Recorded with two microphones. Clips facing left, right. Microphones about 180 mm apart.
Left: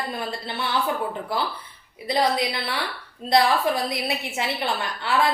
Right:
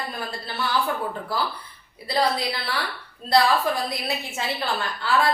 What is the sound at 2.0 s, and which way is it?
A woman's voice, 20° left (ahead or behind).